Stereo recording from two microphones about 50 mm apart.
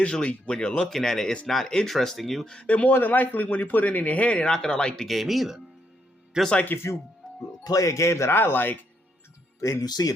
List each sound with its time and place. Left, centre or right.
0.0 s speech: left
1.9 s speech: centre
2.5 s speech: left
2.9 s speech: left; by 5.0 s centre
5.0 s speech: centre
6.3 s speech: centre
6.7 s speech: left
7.8 s speech: left
8.3 s speech: left
9.6 s speech: left